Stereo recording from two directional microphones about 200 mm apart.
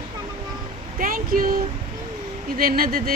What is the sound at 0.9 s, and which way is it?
Speech, 45° right (ahead or behind).